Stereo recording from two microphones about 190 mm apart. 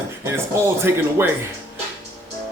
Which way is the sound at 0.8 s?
15° right (ahead or behind).